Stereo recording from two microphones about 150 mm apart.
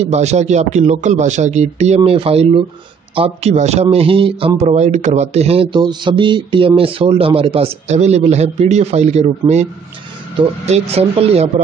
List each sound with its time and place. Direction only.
0.0 s speech: 45° right (ahead or behind)
4.6 s speech: 50° right (ahead or behind)